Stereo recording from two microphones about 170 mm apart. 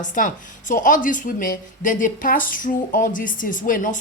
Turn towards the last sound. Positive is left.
turn(degrees=50)  # may be behind; listen again after turning